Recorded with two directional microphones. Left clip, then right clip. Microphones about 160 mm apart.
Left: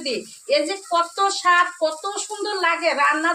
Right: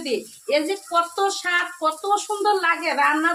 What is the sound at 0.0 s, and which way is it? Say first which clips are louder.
Speech: right 1 dB; 15° right (ahead or behind).